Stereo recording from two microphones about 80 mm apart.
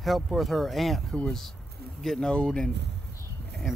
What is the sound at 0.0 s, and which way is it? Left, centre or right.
Speech, centre.